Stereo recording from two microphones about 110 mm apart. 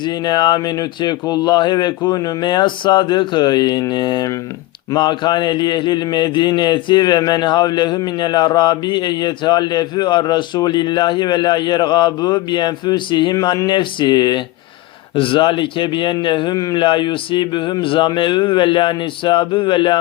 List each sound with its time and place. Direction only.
0.3 s speech: 40° left (ahead or behind)